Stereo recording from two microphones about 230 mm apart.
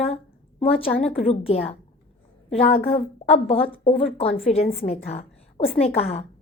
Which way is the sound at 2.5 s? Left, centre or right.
Left.